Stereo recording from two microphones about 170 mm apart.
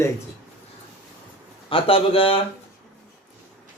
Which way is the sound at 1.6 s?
30° left (ahead or behind).